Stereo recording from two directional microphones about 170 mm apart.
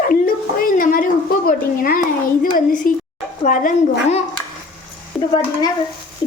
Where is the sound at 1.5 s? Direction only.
55° left (ahead or behind).